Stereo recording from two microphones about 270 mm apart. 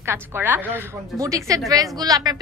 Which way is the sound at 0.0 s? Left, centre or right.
Centre.